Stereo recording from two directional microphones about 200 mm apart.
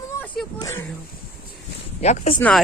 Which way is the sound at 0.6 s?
10° left (ahead or behind).